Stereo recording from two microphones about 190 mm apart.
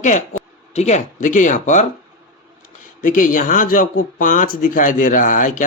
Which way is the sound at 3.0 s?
45° left (ahead or behind).